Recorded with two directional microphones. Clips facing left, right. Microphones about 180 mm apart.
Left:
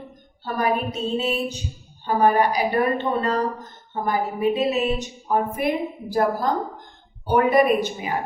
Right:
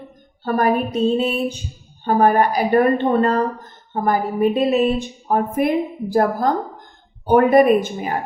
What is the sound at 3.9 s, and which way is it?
A woman's voice, 50° right (ahead or behind).